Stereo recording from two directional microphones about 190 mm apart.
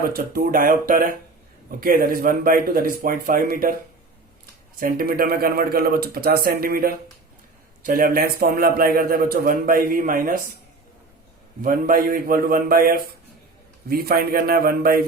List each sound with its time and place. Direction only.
0.0 s a man's voice: 50° right (ahead or behind)
4.8 s a man's voice: 50° right (ahead or behind)
11.6 s a man's voice: 50° right (ahead or behind)